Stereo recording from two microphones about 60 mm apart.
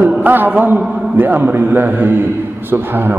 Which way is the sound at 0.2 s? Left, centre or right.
Right.